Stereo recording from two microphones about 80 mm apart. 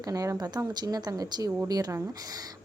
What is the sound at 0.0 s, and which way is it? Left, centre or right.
A woman's voice, right.